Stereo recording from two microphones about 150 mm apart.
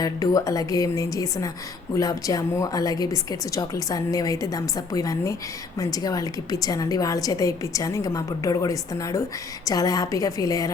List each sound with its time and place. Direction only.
0.0 s a woman's voice: 25° left (ahead or behind)